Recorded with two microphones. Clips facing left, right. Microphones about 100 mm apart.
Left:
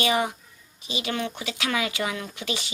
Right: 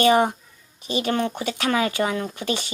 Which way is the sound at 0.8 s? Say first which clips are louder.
Right 6 dB; 45° right (ahead or behind).